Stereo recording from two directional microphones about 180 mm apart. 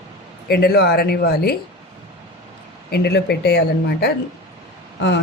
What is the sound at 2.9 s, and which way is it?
A woman's voice, 65° left (ahead or behind).